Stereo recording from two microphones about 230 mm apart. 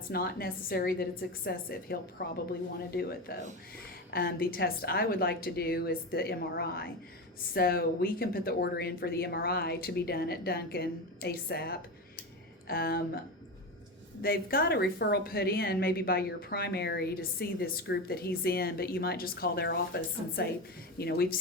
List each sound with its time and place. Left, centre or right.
0.1 s a woman's voice: left
14.2 s a woman's voice: left